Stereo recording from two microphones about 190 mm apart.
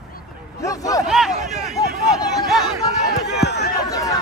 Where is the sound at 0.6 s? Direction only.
15° left (ahead or behind).